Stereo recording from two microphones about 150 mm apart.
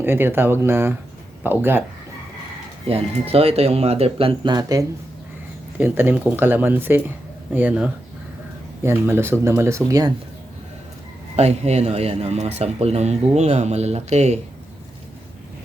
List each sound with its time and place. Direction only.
0.0 s speech: 15° right (ahead or behind)
2.9 s speech: 40° right (ahead or behind); by 4.9 s 25° right (ahead or behind)
5.7 s speech: 10° right (ahead or behind)
11.3 s speech: 45° right (ahead or behind)